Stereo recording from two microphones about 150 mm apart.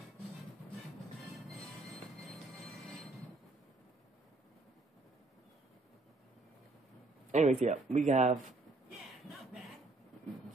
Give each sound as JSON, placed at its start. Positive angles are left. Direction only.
{"t": 2.9, "sound": "train", "side_deg": 0}
{"t": 7.2, "sound": "speech", "side_deg": -50}
{"t": 9.0, "sound": "a sound", "side_deg": 0}